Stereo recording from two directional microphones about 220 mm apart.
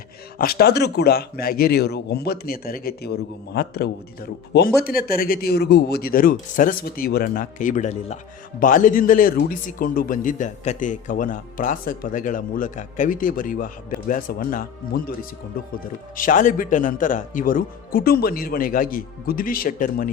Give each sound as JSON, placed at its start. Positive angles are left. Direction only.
{"t": 0.3, "sound": "speech", "side_deg": 45}